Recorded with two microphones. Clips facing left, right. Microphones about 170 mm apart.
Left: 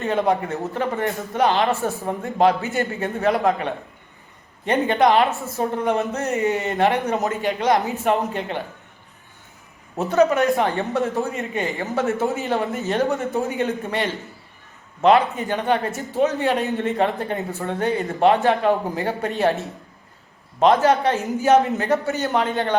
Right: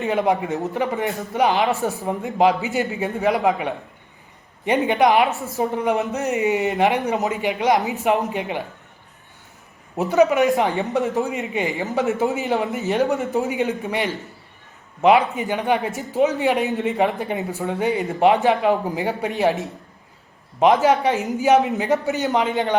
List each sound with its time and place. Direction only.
0.0 s a man's voice: 15° right (ahead or behind)
10.0 s a man's voice: 15° right (ahead or behind)